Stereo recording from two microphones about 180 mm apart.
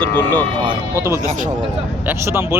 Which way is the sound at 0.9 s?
15° right (ahead or behind).